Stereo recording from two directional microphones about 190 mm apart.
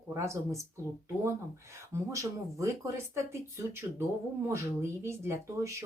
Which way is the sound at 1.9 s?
15° right (ahead or behind).